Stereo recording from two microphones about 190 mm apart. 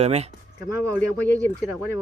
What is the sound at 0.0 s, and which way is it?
Speech, 35° right (ahead or behind).